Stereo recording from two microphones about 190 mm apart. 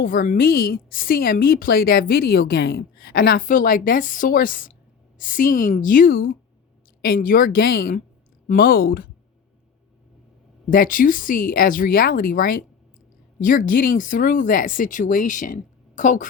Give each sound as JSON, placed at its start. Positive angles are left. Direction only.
{"t": 0.0, "sound": "a woman's voice", "side_deg": 45}
{"t": 10.7, "sound": "a woman's voice", "side_deg": 45}